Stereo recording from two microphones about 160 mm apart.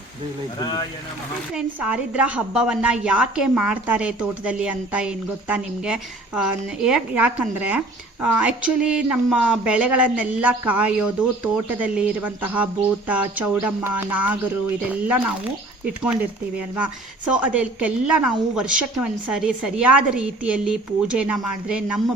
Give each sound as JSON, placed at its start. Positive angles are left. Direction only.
{"t": 0.6, "sound": "speech", "side_deg": 25}
{"t": 1.5, "sound": "a woman's voice", "side_deg": -5}
{"t": 17.3, "sound": "a woman's voice", "side_deg": -5}